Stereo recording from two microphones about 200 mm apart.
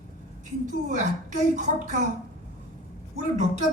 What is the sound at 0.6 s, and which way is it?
Speech, 40° right (ahead or behind).